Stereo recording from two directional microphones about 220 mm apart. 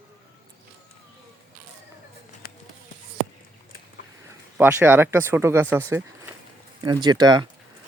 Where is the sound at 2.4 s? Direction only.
45° left (ahead or behind).